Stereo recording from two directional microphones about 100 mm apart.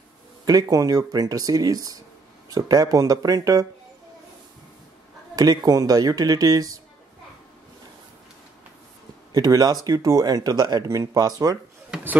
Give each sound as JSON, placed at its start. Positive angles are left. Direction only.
{"t": 0.5, "sound": "speech", "side_deg": -40}
{"t": 5.3, "sound": "speech", "side_deg": -40}
{"t": 9.3, "sound": "speech", "side_deg": -40}